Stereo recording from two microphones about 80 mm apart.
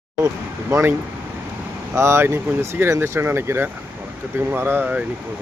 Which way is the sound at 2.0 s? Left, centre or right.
Right.